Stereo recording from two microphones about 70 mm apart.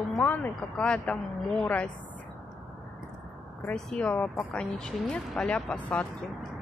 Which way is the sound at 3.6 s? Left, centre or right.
Centre.